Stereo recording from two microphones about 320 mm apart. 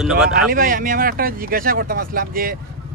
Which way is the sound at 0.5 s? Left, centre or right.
Right.